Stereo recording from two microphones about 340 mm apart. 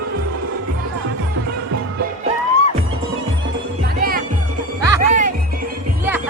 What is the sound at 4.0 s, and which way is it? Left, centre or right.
Music, right.